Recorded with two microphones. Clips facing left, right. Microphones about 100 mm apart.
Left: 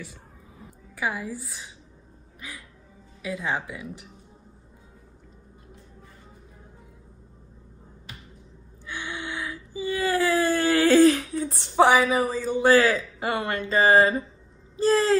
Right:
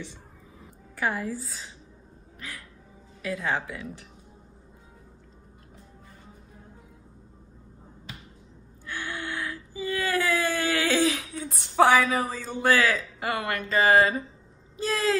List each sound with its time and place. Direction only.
0.9 s speech: 10° left (ahead or behind)
8.8 s whimper: 15° left (ahead or behind); by 11.4 s 40° left (ahead or behind)
11.5 s speech: 25° left (ahead or behind)
12.6 s speech: 30° left (ahead or behind)
14.8 s a sound: 35° left (ahead or behind)